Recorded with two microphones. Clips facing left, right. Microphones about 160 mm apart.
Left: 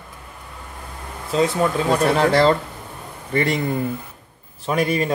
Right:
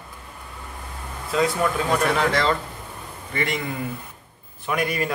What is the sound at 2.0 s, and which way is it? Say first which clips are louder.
Speech: left 8 dB; 35° left (ahead or behind).